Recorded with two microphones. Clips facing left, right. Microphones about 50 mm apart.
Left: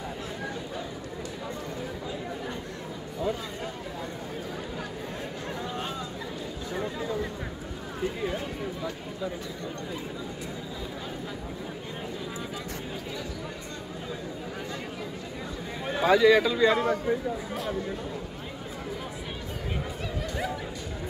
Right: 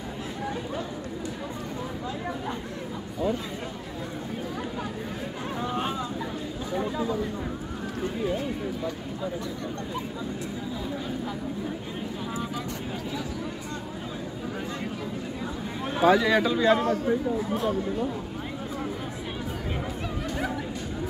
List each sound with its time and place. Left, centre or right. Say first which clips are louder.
5.6 s vehicle: right 6 dB; right
15.9 s speech: left 1 dB; centre